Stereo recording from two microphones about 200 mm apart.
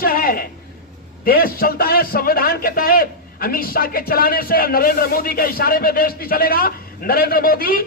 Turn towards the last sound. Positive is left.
turn(degrees=45)  # may be behind; listen again after turning